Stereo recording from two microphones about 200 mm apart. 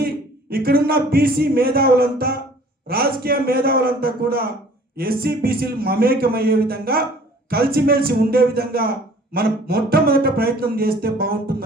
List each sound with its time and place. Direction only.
0.5 s speech: 50° right (ahead or behind)